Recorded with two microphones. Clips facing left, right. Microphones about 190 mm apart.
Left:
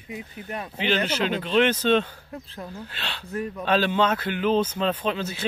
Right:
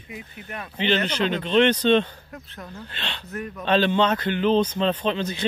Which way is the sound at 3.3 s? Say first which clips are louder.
Left 4 dB; 30° left (ahead or behind).